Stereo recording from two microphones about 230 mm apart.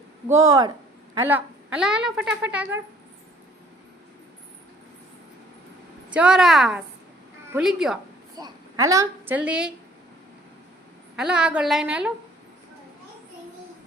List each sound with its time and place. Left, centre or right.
0.3 s speech: centre
6.1 s speech: centre
8.4 s a woman's voice: centre
11.2 s speech: centre